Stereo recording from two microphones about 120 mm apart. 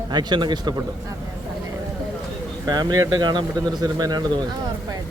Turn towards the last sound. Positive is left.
turn(degrees=-35)  # may be behind; listen again after turning